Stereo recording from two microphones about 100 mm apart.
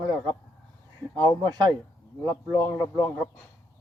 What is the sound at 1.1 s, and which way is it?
A man's voice, 45° right (ahead or behind).